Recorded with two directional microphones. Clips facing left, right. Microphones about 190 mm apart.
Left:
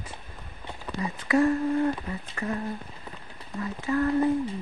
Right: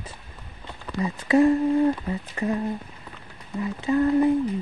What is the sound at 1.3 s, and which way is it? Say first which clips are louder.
Speech: right 4 dB; 15° right (ahead or behind).